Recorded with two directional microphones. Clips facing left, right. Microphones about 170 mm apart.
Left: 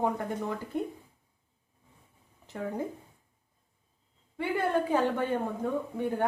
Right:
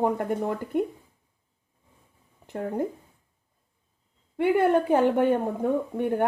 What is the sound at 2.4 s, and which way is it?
Speech, 55° right (ahead or behind).